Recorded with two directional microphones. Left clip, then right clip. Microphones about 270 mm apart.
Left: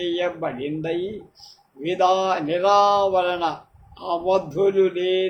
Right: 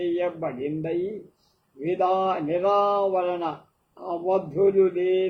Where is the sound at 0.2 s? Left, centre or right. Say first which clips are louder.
Left 2 dB; left.